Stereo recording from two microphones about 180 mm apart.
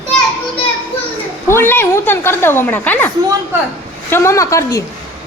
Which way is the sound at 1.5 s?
10° left (ahead or behind).